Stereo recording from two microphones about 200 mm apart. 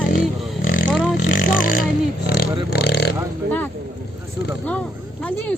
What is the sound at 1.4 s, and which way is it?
Burping, 45° left (ahead or behind).